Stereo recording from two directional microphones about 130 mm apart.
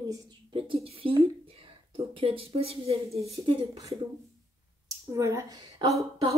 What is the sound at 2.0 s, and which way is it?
Speech, 45° right (ahead or behind).